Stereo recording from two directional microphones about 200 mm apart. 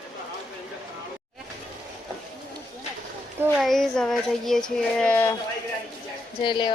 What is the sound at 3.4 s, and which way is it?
Speech, centre (ahead or behind).